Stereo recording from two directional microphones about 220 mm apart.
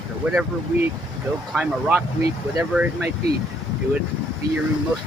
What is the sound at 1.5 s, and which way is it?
Speech, 5° right (ahead or behind).